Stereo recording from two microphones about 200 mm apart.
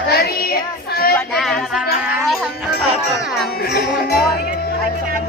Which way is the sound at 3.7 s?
55° left (ahead or behind).